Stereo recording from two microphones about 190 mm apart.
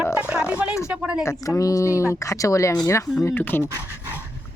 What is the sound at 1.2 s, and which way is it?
Speech, 15° left (ahead or behind).